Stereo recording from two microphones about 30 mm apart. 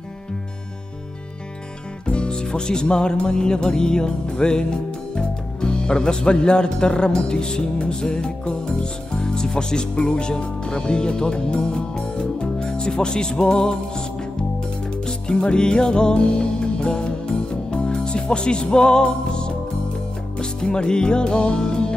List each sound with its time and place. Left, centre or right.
2.0 s speech: left
12.2 s music: left
13.0 s speech: left
14.6 s music: left